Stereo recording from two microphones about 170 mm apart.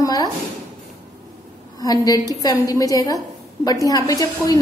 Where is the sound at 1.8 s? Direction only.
20° left (ahead or behind).